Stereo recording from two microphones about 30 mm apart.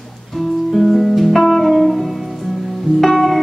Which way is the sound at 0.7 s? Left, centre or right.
Centre.